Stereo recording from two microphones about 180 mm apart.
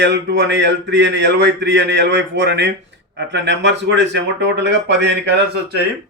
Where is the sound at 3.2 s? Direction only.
80° right.